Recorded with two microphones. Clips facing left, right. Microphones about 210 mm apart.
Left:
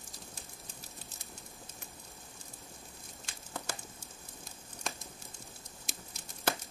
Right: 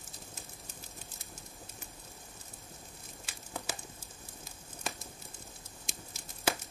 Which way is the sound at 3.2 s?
5° right (ahead or behind).